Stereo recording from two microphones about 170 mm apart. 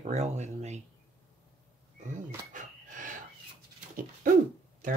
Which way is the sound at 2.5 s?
50° right (ahead or behind).